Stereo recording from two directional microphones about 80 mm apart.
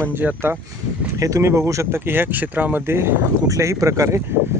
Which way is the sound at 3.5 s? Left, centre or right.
Right.